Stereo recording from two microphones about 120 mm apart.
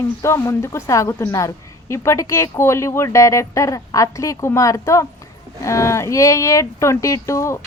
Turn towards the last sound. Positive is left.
turn(degrees=25)  # may be behind; listen again after turning